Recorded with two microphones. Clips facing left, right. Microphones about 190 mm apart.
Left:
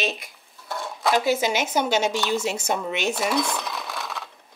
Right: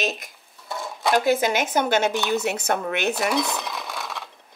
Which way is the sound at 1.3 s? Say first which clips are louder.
Right 2 dB; 55° right (ahead or behind).